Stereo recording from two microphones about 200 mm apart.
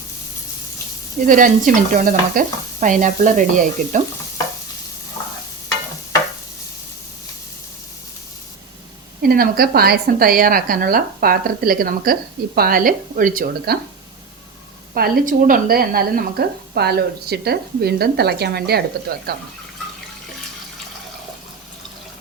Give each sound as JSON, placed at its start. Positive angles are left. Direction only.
{"t": 1.3, "sound": "stir", "side_deg": -40}
{"t": 9.2, "sound": "a woman's voice", "side_deg": -50}
{"t": 14.9, "sound": "a woman's voice", "side_deg": -50}